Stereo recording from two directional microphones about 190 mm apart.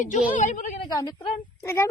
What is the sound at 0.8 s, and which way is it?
A woman's voice, 20° left (ahead or behind).